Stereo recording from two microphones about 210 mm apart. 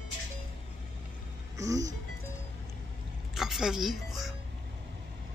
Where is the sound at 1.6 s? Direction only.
15° right (ahead or behind).